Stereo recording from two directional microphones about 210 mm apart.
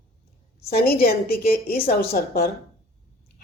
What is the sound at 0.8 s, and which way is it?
A woman's voice, 45° left (ahead or behind).